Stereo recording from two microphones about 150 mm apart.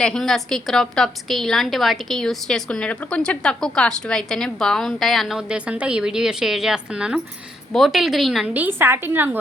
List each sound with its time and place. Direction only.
0.0 s a woman's voice: 5° left (ahead or behind); by 9.4 s 15° right (ahead or behind)